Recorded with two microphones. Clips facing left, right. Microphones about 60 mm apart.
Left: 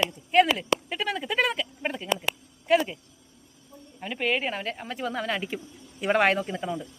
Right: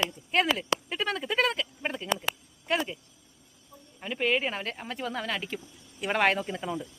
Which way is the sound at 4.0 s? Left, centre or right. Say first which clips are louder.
Even; centre.